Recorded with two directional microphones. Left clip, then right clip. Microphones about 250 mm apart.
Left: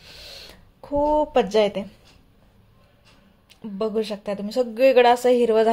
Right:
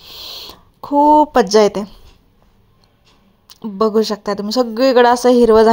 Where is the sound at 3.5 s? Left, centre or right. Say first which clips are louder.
Right 10 dB; right.